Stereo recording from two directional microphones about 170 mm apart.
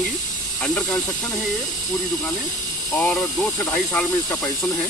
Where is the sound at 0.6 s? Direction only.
Centre (ahead or behind).